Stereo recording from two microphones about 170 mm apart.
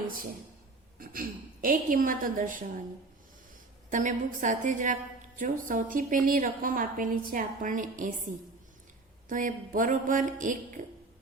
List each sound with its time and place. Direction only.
0.9 s a woman's voice: 55° right (ahead or behind)
3.8 s a woman's voice: 50° right (ahead or behind)
9.3 s a woman's voice: 50° right (ahead or behind)